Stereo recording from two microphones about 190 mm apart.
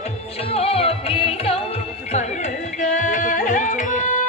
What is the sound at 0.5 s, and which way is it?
Music, 30° left (ahead or behind).